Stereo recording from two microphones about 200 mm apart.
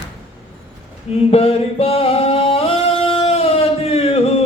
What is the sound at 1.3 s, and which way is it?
Music, 30° left (ahead or behind).